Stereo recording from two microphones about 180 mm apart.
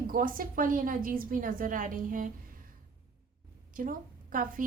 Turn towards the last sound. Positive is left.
turn(degrees=-50)  # may be behind; listen again after turning